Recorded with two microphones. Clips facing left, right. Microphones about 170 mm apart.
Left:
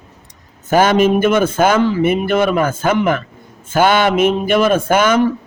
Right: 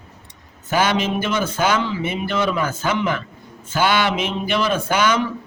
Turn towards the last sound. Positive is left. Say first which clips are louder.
# left 6 dB
turn(degrees=50)  # may be behind; listen again after turning